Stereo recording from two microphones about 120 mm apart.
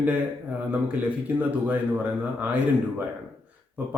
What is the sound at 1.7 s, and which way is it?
Speech, 15° right (ahead or behind).